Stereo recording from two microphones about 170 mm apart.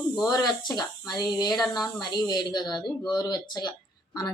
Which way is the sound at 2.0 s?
25° left (ahead or behind).